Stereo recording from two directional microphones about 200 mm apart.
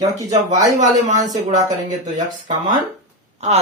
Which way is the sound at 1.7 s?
20° right (ahead or behind).